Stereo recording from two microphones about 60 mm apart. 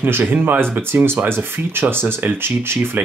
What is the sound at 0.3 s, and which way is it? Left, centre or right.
Speech, right.